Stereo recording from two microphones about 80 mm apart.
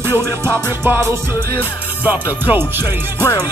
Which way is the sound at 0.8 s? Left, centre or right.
Right.